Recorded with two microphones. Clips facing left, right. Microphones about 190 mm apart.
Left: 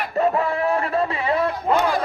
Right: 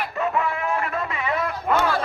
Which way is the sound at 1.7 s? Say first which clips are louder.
Left 1 dB; 15° left (ahead or behind).